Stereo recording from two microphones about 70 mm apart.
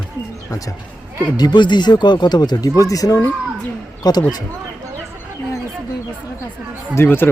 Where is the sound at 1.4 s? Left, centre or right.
Left.